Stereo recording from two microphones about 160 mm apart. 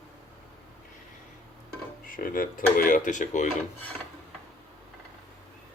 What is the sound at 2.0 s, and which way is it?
Speech, 60° left (ahead or behind).